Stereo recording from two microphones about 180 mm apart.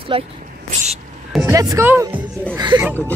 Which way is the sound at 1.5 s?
20° right (ahead or behind).